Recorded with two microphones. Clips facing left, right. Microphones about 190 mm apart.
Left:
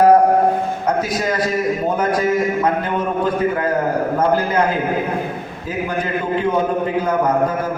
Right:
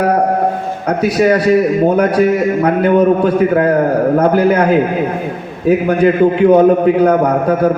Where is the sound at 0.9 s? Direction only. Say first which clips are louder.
Right 10 dB; 65° right (ahead or behind).